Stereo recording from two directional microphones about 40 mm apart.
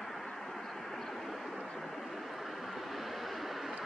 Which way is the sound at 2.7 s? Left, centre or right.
Centre.